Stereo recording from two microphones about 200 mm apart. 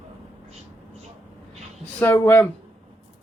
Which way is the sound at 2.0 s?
10° left (ahead or behind).